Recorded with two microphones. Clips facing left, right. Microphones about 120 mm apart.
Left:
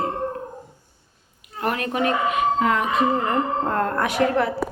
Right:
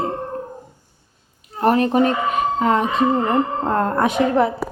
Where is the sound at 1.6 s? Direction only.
30° right (ahead or behind).